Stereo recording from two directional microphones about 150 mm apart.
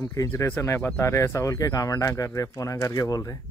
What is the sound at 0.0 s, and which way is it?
Speech, 20° left (ahead or behind).